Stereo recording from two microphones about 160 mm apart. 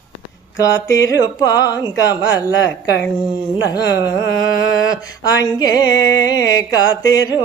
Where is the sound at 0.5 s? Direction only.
20° left (ahead or behind).